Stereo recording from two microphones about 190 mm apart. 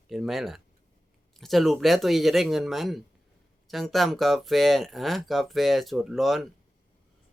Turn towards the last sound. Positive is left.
turn(degrees=0)  # may be behind; listen again after turning